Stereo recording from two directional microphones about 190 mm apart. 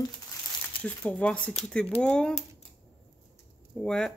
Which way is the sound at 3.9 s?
5° left (ahead or behind).